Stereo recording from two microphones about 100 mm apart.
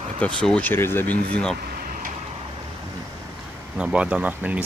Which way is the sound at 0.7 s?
25° left (ahead or behind).